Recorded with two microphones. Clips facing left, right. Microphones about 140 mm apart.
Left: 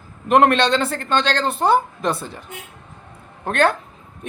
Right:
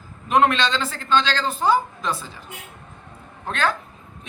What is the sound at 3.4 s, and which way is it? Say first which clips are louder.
Speech: left 6 dB; 60° left (ahead or behind).